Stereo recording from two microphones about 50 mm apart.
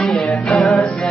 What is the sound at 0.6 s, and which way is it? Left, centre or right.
Music, centre.